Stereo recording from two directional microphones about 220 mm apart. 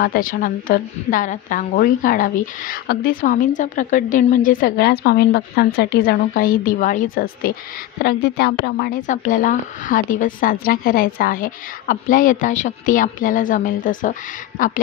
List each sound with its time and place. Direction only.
0.0 s a woman's voice: 40° left (ahead or behind)